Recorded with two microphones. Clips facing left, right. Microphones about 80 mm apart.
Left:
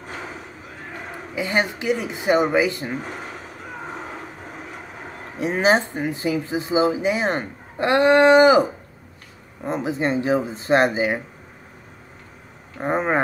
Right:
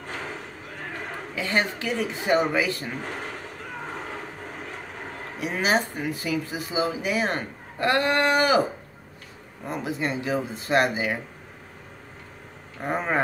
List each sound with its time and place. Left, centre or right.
0.0 s a sound: centre
5.4 s speech: left
9.7 s speech: left
12.7 s speech: left